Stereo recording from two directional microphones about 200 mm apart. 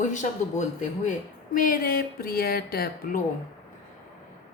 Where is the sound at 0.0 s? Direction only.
35° left (ahead or behind).